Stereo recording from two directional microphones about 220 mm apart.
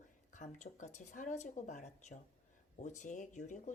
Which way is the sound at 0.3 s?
35° left (ahead or behind).